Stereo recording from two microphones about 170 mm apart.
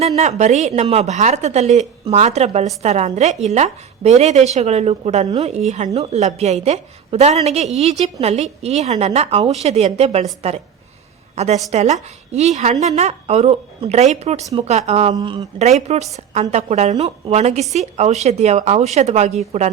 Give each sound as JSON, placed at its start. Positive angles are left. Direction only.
{"t": 0.2, "sound": "a woman's voice", "side_deg": -45}
{"t": 11.3, "sound": "a woman's voice", "side_deg": -40}
{"t": 15.1, "sound": "speech", "side_deg": -25}
{"t": 15.5, "sound": "a woman's voice", "side_deg": -40}